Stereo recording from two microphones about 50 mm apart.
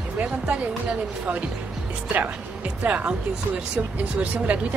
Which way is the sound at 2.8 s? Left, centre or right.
Right.